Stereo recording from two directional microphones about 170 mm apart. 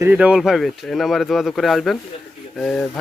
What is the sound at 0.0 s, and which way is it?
Speech, 10° right (ahead or behind).